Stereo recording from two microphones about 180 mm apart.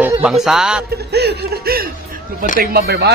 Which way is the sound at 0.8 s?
65° right (ahead or behind).